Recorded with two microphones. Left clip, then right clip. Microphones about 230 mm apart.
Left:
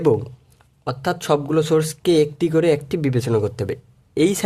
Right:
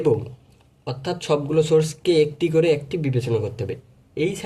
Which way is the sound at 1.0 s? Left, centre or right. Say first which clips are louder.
Left 3 dB; left.